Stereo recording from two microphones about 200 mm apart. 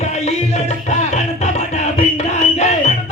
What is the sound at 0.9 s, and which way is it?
Music, 35° left (ahead or behind).